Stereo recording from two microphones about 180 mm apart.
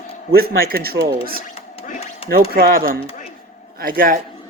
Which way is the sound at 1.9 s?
35° left (ahead or behind).